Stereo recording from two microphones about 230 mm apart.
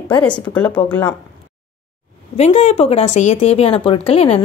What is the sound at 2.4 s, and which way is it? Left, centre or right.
Speech, left.